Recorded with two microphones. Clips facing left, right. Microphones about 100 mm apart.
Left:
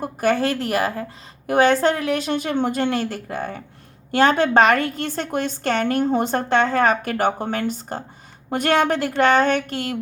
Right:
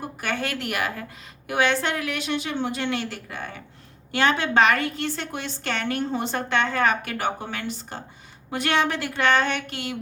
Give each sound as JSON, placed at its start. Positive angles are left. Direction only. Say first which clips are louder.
{"t": 0.0, "sound": "a woman's voice", "louder": "left 9 dB", "side_deg": 40}